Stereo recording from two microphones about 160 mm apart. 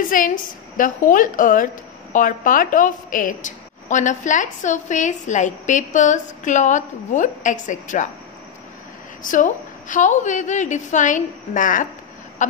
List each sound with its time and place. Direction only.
0.1 s a woman's voice: 55° left (ahead or behind)
9.2 s a woman's voice: 55° left (ahead or behind)
12.4 s a sound: 50° left (ahead or behind)